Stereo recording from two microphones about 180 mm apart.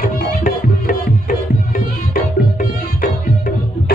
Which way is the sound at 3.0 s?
50° left (ahead or behind).